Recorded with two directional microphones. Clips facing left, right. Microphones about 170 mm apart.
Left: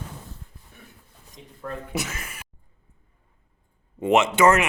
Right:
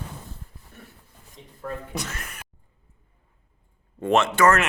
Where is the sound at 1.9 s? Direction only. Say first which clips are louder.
Left 3 dB; 5° left (ahead or behind).